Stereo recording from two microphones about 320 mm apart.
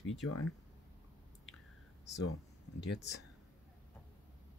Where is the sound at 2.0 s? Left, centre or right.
Left.